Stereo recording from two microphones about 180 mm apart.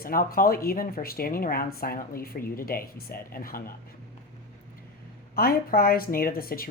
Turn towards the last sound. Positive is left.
turn(degrees=55)  # may be behind; listen again after turning